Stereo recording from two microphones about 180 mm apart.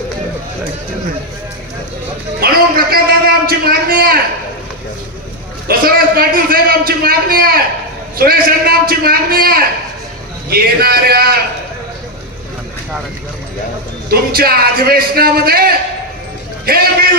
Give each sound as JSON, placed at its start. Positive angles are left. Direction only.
{"t": 2.4, "sound": "a man's voice", "side_deg": -55}
{"t": 5.6, "sound": "a man's voice", "side_deg": -55}
{"t": 14.1, "sound": "a man's voice", "side_deg": -55}
{"t": 16.7, "sound": "a man's voice", "side_deg": -55}